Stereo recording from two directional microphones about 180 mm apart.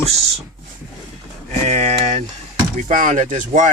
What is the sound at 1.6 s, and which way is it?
Speech, 35° right (ahead or behind).